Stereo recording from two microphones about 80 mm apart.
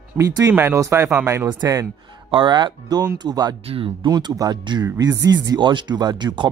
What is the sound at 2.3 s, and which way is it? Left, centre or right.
Speech, right.